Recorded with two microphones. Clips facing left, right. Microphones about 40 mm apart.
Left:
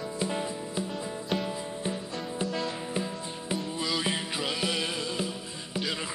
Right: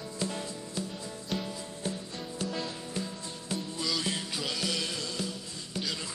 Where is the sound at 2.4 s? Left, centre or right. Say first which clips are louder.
Left 3 dB; centre.